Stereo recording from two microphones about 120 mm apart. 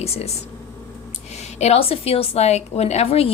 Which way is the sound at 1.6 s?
55° left (ahead or behind).